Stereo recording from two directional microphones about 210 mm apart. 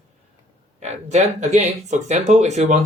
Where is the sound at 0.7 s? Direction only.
30° right (ahead or behind).